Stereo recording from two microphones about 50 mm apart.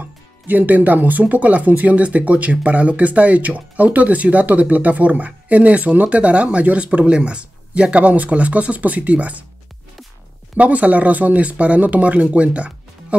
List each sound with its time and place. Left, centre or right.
0.0 s speech: right
10.6 s speech: right